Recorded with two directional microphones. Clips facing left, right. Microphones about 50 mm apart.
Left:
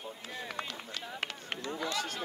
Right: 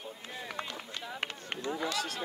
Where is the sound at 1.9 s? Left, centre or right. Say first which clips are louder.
Even; left.